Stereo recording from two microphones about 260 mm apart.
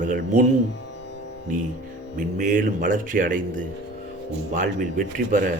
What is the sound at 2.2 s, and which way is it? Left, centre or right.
Speech, right.